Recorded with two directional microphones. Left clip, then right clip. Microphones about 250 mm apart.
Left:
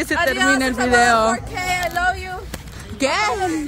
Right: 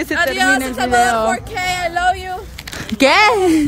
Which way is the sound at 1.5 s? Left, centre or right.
Right.